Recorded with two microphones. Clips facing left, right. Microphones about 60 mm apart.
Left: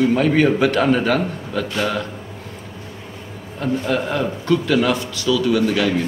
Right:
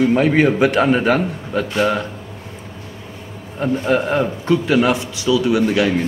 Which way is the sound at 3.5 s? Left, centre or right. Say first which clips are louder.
Right 3 dB; right.